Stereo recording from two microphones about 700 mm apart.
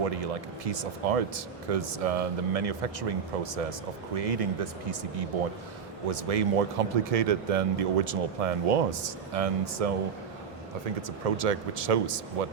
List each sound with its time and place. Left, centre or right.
0.0 s a man's voice: right
11.3 s a man's voice: right